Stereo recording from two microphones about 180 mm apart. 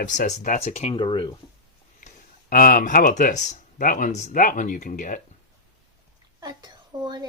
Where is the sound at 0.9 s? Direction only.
25° left (ahead or behind).